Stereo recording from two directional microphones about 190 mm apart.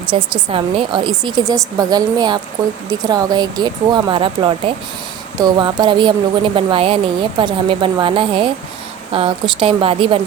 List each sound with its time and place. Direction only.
0.1 s speech: 25° right (ahead or behind)